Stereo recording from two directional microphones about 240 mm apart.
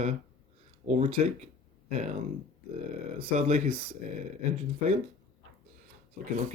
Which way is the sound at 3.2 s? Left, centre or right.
Right.